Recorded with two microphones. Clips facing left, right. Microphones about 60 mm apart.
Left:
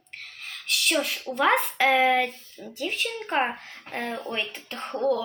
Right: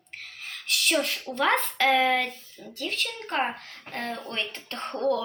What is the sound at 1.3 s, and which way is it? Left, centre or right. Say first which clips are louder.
A woman's voice: left 2 dB; centre.